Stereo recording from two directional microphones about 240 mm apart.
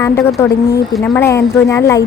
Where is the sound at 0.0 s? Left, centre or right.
Centre.